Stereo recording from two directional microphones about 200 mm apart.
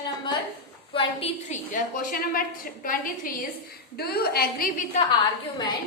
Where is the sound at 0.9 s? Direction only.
25° left (ahead or behind); by 4.6 s 50° left (ahead or behind).